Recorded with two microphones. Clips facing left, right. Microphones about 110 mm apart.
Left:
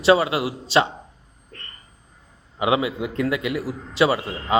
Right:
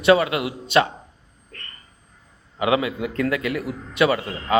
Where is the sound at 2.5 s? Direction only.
25° left (ahead or behind).